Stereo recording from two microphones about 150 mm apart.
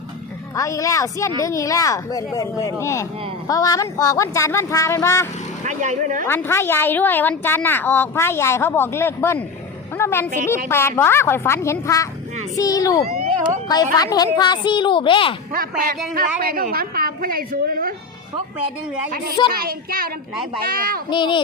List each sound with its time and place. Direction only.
0.5 s speech: 20° left (ahead or behind)
5.6 s speech: 55° right (ahead or behind)
6.2 s a woman's voice: 15° left (ahead or behind)
13.1 s a sound: 50° right (ahead or behind)
13.9 s a woman's voice: 25° left (ahead or behind)
15.5 s a woman's voice: 70° right (ahead or behind)
19.5 s a woman's voice: 75° right (ahead or behind)
21.1 s a woman's voice: 30° left (ahead or behind)